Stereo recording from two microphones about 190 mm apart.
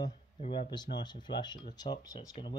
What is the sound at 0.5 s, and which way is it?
Speech, 25° left (ahead or behind).